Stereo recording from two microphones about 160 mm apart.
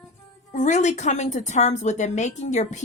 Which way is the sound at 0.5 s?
50° left (ahead or behind).